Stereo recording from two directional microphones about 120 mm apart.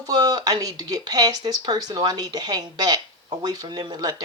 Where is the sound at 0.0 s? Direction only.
35° right (ahead or behind).